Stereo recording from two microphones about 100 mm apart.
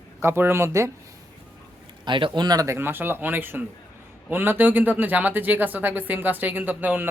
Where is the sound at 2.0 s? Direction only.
55° right (ahead or behind).